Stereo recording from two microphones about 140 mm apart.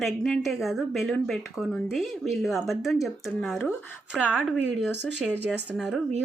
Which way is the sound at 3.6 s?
10° right (ahead or behind).